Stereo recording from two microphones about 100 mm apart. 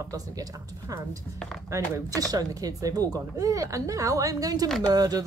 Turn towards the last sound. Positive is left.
turn(degrees=-40)  # may be behind; listen again after turning